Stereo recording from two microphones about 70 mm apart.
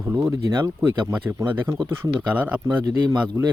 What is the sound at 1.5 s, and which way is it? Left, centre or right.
Speech, right.